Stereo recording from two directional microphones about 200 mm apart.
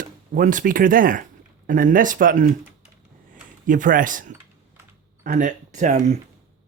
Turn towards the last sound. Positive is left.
turn(degrees=-35)  # may be behind; listen again after turning